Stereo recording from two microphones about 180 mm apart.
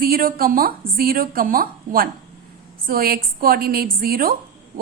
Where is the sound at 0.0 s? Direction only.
55° right (ahead or behind).